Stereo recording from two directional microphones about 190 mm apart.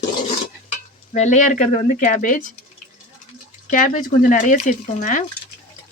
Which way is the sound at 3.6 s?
40° left (ahead or behind).